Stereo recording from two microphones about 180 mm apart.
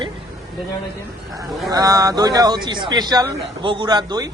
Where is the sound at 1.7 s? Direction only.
20° right (ahead or behind).